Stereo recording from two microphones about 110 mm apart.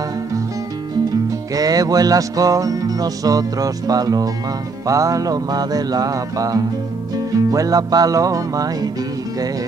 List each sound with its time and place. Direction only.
1.5 s music: 35° right (ahead or behind)